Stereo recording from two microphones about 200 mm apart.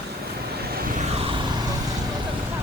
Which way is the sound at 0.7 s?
45° right (ahead or behind).